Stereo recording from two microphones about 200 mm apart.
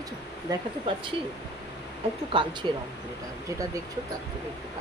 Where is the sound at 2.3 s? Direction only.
25° right (ahead or behind).